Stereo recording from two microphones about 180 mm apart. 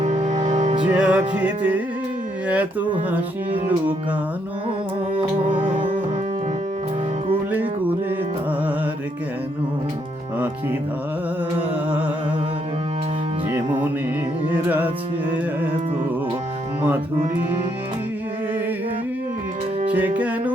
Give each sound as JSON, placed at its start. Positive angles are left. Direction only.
{"t": 0.0, "sound": "music", "side_deg": -40}
{"t": 0.9, "sound": "music", "side_deg": -5}
{"t": 1.3, "sound": "speech", "side_deg": -5}
{"t": 5.2, "sound": "music", "side_deg": -30}
{"t": 14.5, "sound": "speech", "side_deg": -10}
{"t": 19.9, "sound": "speech", "side_deg": -10}